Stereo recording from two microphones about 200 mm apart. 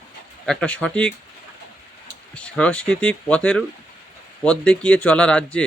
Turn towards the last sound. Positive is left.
turn(degrees=5)  # may be behind; listen again after turning